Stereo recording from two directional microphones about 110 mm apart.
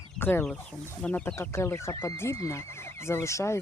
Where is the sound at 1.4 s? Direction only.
25° left (ahead or behind).